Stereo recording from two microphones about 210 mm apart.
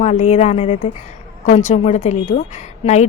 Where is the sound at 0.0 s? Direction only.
35° left (ahead or behind).